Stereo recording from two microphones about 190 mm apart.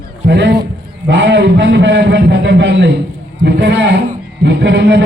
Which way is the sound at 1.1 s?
70° right (ahead or behind).